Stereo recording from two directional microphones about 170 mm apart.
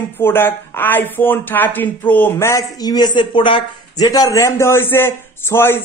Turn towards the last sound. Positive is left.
turn(degrees=15)  # may be behind; listen again after turning